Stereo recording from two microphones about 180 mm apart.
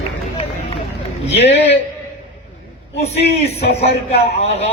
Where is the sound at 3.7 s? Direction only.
35° left (ahead or behind).